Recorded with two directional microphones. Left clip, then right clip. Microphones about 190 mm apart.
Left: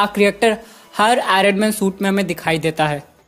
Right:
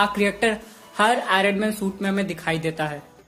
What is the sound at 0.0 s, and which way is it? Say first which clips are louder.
Speech: left 6 dB; 40° left (ahead or behind).